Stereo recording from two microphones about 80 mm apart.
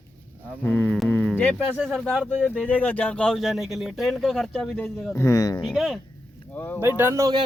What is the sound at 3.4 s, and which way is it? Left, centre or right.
Speech, centre.